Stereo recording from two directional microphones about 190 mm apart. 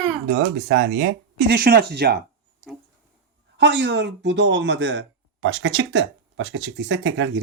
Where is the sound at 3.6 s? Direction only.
65° right (ahead or behind).